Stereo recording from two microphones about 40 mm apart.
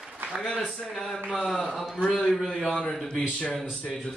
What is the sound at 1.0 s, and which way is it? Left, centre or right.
A man's voice, centre.